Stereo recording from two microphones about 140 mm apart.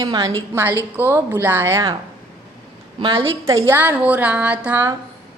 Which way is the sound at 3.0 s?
35° right (ahead or behind).